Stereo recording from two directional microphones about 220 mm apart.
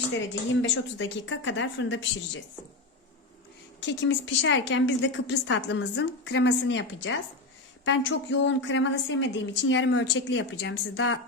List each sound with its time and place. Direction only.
0.6 s a woman's voice: 60° left (ahead or behind)
3.8 s a woman's voice: 55° left (ahead or behind)